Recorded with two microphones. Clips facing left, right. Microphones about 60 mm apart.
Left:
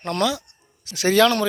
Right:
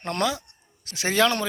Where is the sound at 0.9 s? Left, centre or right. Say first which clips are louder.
Left 5 dB; centre.